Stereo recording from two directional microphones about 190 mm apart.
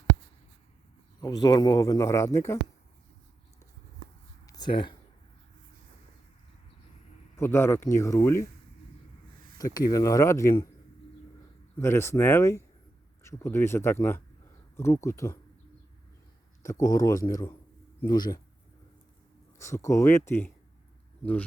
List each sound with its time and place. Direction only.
1.2 s speech: 20° left (ahead or behind)
4.4 s a sound: 20° left (ahead or behind)
7.3 s speech: 15° left (ahead or behind)
9.6 s speech: 20° left (ahead or behind)
11.8 s speech: 15° left (ahead or behind)
16.6 s speech: 20° left (ahead or behind)
19.5 s speech: 15° left (ahead or behind)